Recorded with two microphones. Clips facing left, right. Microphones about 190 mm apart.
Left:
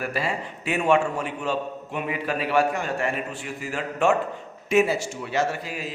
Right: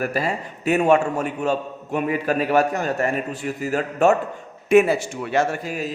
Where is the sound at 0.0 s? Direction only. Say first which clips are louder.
Right 4 dB; 45° right (ahead or behind).